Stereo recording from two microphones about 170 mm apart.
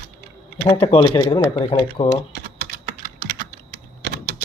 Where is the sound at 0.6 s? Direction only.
30° left (ahead or behind).